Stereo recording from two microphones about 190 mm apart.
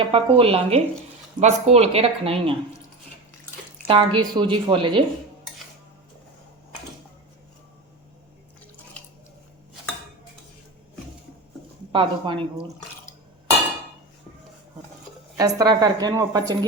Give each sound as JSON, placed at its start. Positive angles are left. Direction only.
{"t": 0.1, "sound": "a woman's voice", "side_deg": -30}
{"t": 3.8, "sound": "a woman's voice", "side_deg": -25}
{"t": 11.9, "sound": "speech", "side_deg": -25}
{"t": 15.4, "sound": "a woman's voice", "side_deg": -20}